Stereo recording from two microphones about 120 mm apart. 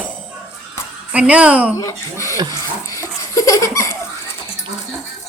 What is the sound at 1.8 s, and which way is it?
Speech, 25° left (ahead or behind).